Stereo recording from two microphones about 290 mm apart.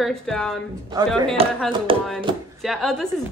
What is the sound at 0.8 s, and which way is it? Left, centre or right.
Speech, centre.